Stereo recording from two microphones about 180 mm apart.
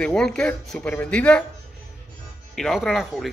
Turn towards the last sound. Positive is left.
turn(degrees=0)  # may be behind; listen again after turning